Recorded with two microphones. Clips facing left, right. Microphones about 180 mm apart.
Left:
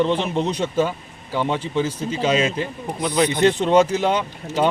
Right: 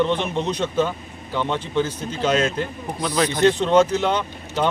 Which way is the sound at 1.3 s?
5° left (ahead or behind).